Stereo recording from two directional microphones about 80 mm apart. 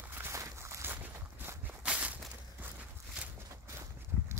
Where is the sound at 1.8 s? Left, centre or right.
Centre.